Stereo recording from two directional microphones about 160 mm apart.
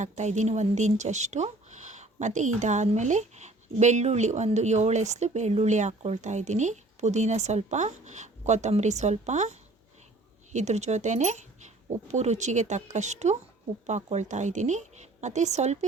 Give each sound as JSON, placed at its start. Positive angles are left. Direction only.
{"t": 0.0, "sound": "speech", "side_deg": -45}